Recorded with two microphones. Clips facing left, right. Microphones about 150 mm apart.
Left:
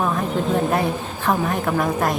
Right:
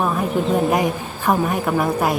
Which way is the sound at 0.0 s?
10° right (ahead or behind).